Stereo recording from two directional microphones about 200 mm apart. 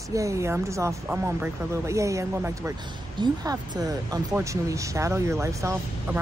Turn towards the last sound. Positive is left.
turn(degrees=-15)  # may be behind; listen again after turning